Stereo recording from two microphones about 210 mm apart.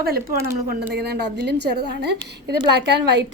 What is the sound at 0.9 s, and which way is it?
A woman's voice, 50° right (ahead or behind).